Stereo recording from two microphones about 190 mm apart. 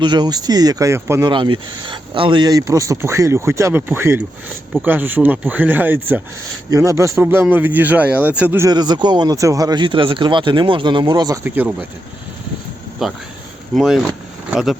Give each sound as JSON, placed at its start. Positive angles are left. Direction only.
{"t": 0.0, "sound": "speech", "side_deg": -25}
{"t": 1.3, "sound": "speech", "side_deg": -25}
{"t": 11.4, "sound": "speech", "side_deg": -10}
{"t": 13.0, "sound": "speech", "side_deg": 0}